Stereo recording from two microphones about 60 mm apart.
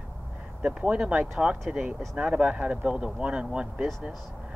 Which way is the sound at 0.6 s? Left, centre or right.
Centre.